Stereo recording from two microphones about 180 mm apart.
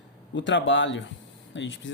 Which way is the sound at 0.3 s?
90° left.